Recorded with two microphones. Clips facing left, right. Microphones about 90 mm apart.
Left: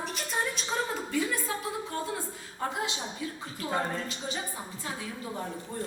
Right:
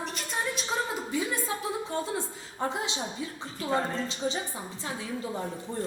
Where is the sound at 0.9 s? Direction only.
20° right (ahead or behind).